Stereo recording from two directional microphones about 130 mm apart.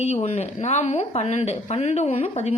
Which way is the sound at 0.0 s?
60° left (ahead or behind).